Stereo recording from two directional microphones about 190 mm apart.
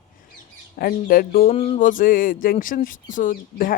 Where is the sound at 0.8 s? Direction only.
50° left (ahead or behind).